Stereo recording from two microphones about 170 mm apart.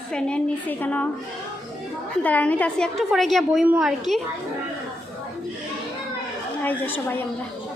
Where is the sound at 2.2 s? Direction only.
10° left (ahead or behind).